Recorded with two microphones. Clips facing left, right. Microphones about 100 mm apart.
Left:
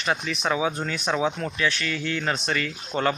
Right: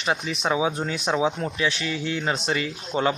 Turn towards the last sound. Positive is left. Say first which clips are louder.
# right 1 dB
turn(degrees=-10)  # may be behind; listen again after turning